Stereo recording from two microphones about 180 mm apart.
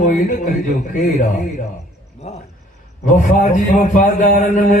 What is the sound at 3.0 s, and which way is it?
Speech, 45° left (ahead or behind).